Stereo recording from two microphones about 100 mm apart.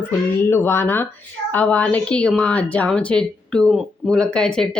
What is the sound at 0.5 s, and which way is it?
Speech, 25° left (ahead or behind).